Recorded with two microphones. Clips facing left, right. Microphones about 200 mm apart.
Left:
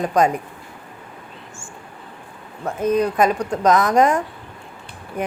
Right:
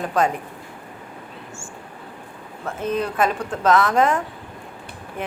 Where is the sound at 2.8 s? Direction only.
40° left (ahead or behind).